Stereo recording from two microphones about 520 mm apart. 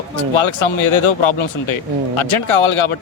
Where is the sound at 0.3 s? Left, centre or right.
Left.